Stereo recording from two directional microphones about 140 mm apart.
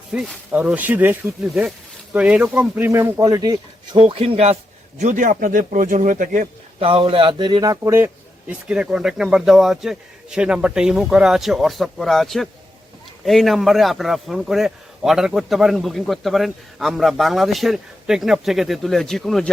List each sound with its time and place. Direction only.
0.1 s speech: 5° right (ahead or behind); by 4.0 s 25° right (ahead or behind)
4.0 s speech: 40° right (ahead or behind)
4.9 s speech: 65° right (ahead or behind)
6.7 s a man's voice: 40° right (ahead or behind); by 19.5 s centre (ahead or behind)